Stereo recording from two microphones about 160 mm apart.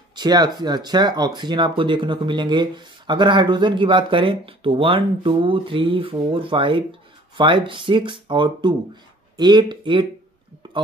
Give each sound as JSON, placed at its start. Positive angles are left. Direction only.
{"t": 0.1, "sound": "speech", "side_deg": -25}